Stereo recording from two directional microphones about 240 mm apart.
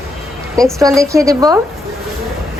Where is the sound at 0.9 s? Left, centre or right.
Centre.